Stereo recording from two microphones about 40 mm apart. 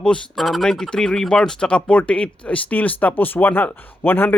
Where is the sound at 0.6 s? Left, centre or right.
Centre.